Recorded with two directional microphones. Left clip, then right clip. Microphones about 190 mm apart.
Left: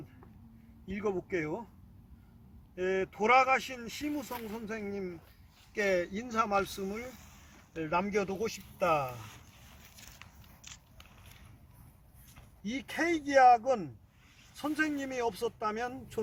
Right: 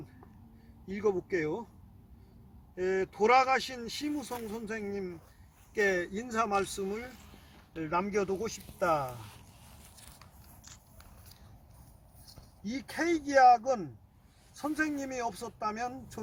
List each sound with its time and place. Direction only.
0.9 s speech: 15° left (ahead or behind)
2.7 s speech: 15° left (ahead or behind)
12.6 s speech: 15° left (ahead or behind)